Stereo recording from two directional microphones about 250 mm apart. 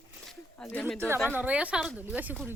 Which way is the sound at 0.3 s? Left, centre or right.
Centre.